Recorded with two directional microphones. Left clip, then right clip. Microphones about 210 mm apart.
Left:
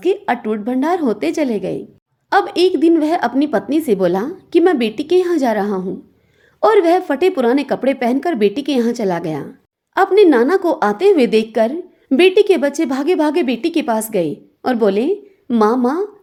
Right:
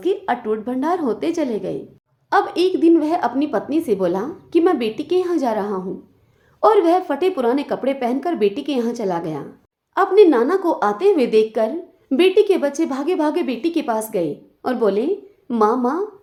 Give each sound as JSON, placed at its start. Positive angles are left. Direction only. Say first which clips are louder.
{"t": 0.0, "sound": "a woman's voice", "louder": "left 3 dB", "side_deg": 30}